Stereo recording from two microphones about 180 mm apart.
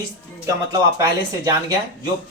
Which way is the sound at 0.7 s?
20° right (ahead or behind).